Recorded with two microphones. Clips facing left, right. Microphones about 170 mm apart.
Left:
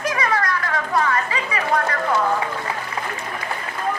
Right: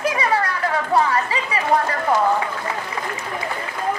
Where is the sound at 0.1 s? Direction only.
30° right (ahead or behind).